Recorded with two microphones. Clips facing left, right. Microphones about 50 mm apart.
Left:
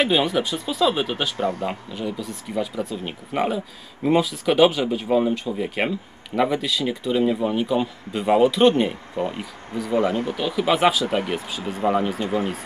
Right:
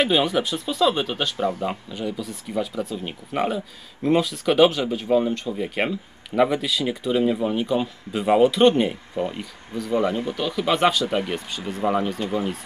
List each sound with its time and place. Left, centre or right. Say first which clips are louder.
0.0 s speech: even; centre
1.3 s speech: even; left
1.7 s speech: even; centre